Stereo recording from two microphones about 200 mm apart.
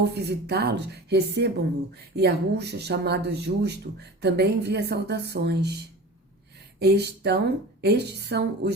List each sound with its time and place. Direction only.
0.0 s a woman's voice: 55° right (ahead or behind)
6.7 s a woman's voice: 55° right (ahead or behind)